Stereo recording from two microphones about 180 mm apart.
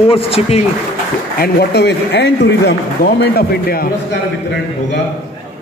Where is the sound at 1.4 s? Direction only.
65° left (ahead or behind).